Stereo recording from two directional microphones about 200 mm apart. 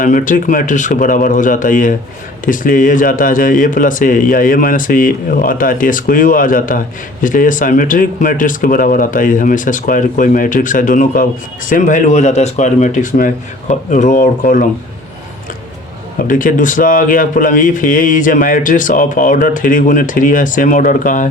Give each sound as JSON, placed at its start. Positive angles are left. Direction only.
{"t": 0.0, "sound": "speech", "side_deg": 40}
{"t": 16.2, "sound": "speech", "side_deg": 40}